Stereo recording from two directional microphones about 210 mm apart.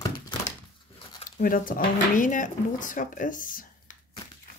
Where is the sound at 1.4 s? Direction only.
40° left (ahead or behind).